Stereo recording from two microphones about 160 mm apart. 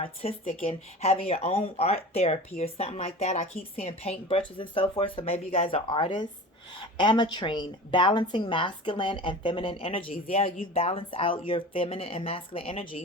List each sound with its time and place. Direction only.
0.0 s a woman's voice: 40° left (ahead or behind)